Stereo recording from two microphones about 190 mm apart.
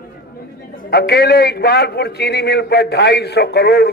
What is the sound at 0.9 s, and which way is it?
A man's voice, 55° left (ahead or behind).